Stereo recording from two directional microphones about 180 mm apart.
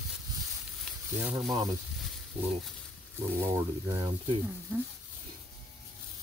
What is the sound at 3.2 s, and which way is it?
Speech, 15° right (ahead or behind).